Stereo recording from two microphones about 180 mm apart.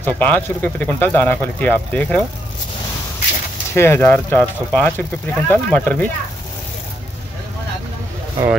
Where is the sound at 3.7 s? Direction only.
15° left (ahead or behind).